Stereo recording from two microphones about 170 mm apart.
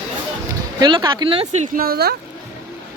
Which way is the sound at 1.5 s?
60° right (ahead or behind).